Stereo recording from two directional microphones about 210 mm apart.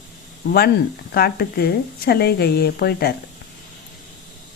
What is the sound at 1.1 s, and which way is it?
Speech, 50° left (ahead or behind).